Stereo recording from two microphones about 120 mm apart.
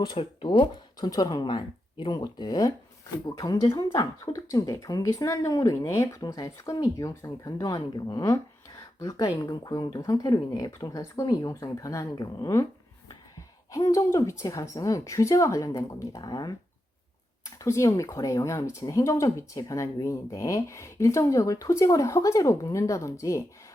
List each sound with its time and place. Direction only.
0.0 s speech: 40° left (ahead or behind)
13.7 s speech: 30° left (ahead or behind)
17.4 s speech: 25° left (ahead or behind)